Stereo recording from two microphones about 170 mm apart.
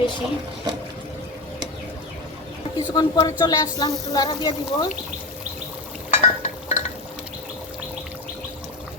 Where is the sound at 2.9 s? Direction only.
20° left (ahead or behind).